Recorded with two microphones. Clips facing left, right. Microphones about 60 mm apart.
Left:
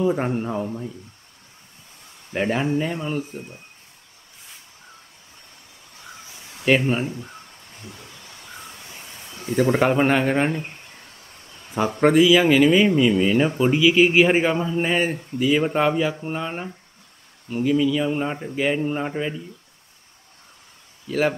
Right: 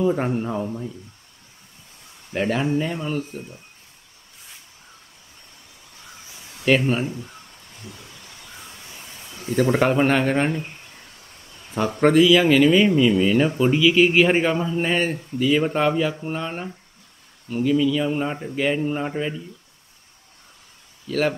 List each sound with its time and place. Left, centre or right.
0.0 s speech: centre
2.3 s a man's voice: centre
6.6 s a man's voice: centre
7.2 s a sound: left
9.6 s a man's voice: centre
12.0 s a man's voice: centre
21.1 s a man's voice: centre